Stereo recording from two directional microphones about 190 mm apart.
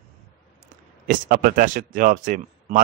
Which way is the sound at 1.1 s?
45° right (ahead or behind).